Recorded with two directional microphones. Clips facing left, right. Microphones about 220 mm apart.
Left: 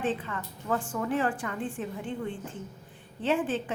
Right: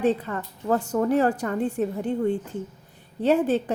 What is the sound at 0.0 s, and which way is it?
A woman's voice, 40° right (ahead or behind).